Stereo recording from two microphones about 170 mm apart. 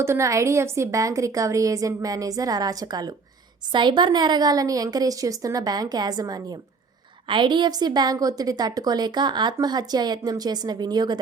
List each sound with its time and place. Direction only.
0.0 s a woman's voice: 15° right (ahead or behind)